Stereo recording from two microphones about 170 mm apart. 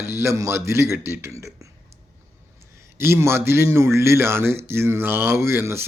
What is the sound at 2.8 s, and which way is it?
Speech, 15° right (ahead or behind).